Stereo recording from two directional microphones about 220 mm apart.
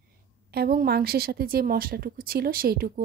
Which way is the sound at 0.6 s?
45° right (ahead or behind).